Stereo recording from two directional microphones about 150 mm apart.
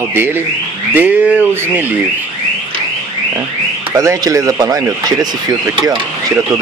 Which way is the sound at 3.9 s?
20° right (ahead or behind).